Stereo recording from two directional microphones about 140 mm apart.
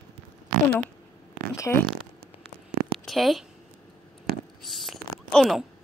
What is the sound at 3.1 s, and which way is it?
Speech, centre (ahead or behind).